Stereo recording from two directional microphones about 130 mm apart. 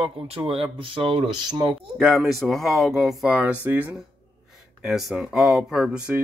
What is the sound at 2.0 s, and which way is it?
Speech, centre (ahead or behind).